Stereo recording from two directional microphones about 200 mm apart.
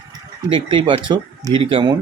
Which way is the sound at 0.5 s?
25° right (ahead or behind).